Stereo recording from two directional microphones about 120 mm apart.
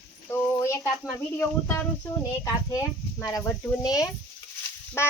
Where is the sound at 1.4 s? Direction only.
20° left (ahead or behind).